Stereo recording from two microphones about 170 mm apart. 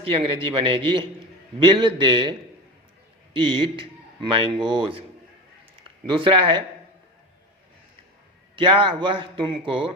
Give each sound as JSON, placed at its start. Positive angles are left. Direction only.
{"t": 0.1, "sound": "speech", "side_deg": -30}
{"t": 3.6, "sound": "speech", "side_deg": -30}
{"t": 8.5, "sound": "speech", "side_deg": -30}